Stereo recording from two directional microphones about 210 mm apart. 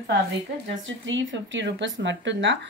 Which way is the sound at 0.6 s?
60° right (ahead or behind).